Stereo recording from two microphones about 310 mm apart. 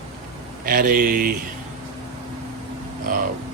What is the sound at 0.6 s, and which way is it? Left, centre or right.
Speech, right.